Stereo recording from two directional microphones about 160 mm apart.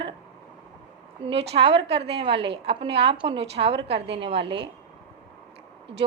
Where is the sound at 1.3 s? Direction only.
40° right (ahead or behind).